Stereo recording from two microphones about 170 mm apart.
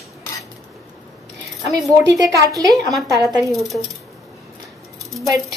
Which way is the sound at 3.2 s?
20° right (ahead or behind).